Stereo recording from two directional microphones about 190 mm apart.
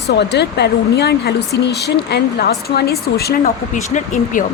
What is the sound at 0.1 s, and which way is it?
Speech, 60° left (ahead or behind).